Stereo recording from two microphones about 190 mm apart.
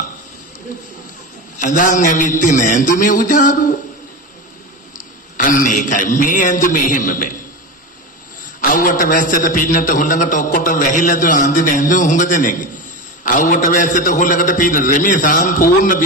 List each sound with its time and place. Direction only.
1.6 s a man's voice: 40° left (ahead or behind)
5.4 s a man's voice: 45° left (ahead or behind)
8.5 s a man's voice: 45° left (ahead or behind)